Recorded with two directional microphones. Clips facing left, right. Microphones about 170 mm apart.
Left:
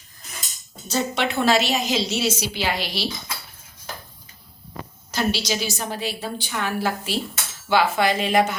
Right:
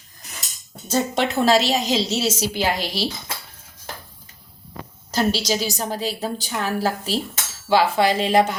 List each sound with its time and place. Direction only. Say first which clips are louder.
0.9 s a woman's voice: right 2 dB; 45° right (ahead or behind)
5.1 s a woman's voice: right 3 dB; 40° right (ahead or behind)